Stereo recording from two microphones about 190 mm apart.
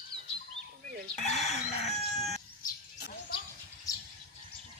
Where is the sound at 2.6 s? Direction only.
55° left (ahead or behind).